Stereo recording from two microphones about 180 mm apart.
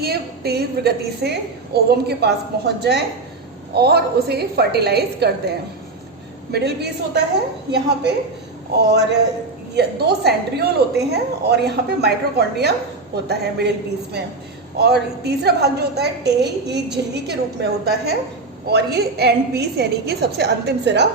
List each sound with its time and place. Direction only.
0.0 s a woman's voice: 60° right (ahead or behind)
8.8 s a woman's voice: 70° right (ahead or behind)
14.8 s a woman's voice: 65° right (ahead or behind)